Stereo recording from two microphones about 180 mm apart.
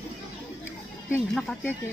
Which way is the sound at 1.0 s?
10° left (ahead or behind).